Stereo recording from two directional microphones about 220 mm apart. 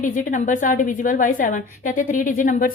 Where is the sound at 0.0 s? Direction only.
35° left (ahead or behind).